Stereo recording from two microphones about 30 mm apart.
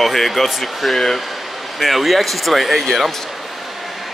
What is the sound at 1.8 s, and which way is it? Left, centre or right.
Speech, centre.